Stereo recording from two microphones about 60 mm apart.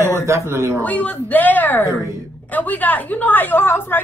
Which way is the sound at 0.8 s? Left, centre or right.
Left.